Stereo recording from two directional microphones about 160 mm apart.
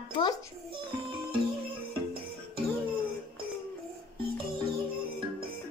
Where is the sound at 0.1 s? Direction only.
30° left (ahead or behind).